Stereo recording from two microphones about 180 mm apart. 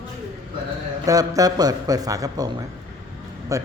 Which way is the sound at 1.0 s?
20° right (ahead or behind).